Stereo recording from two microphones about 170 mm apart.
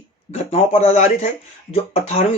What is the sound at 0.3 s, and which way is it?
Speech, 40° left (ahead or behind).